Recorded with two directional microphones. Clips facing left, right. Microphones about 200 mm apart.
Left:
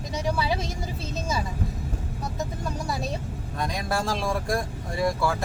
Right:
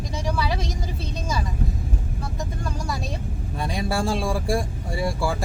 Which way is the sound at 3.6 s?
10° right (ahead or behind).